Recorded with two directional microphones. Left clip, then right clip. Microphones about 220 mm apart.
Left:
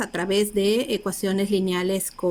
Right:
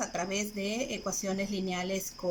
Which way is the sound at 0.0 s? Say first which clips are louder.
Left 10 dB; 50° left (ahead or behind).